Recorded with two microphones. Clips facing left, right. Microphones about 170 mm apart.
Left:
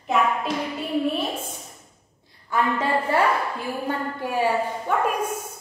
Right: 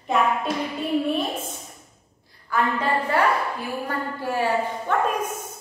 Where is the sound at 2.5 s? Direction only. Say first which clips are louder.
Even; 25° left (ahead or behind).